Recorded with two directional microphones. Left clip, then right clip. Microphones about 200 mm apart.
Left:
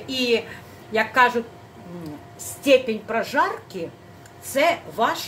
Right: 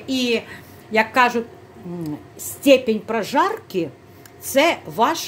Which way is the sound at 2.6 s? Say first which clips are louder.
Right 3 dB; 55° right (ahead or behind).